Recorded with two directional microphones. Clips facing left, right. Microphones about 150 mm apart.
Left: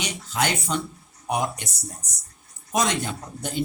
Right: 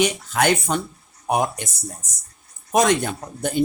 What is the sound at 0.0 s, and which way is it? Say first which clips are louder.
Speech: right 7 dB; 55° right (ahead or behind).